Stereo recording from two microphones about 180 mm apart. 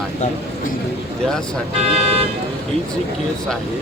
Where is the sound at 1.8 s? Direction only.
35° right (ahead or behind).